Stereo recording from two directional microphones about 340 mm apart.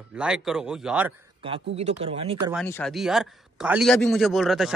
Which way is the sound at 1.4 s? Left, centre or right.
Centre.